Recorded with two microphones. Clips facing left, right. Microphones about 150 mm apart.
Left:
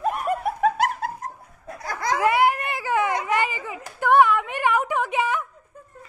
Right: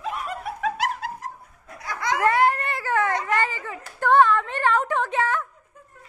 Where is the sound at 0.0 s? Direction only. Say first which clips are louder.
Left 6 dB; 55° left (ahead or behind).